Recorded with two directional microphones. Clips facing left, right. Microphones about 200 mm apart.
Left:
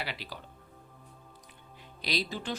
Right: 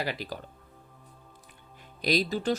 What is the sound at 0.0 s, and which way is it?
Speech, 45° right (ahead or behind).